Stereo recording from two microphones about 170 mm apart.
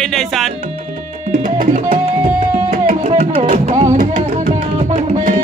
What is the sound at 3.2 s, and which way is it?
Music, 35° right (ahead or behind).